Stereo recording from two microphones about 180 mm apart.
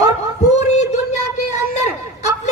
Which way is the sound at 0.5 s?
40° left (ahead or behind).